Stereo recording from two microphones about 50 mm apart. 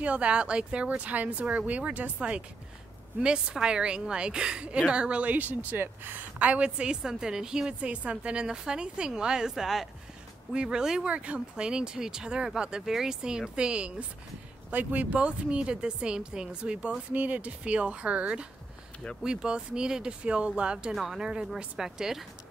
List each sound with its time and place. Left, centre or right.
0.0 s a woman's voice: right
6.8 s a woman's voice: centre
14.7 s a woman's voice: right
17.1 s a woman's voice: right
20.9 s a woman's voice: centre
21.2 s a woman's voice: centre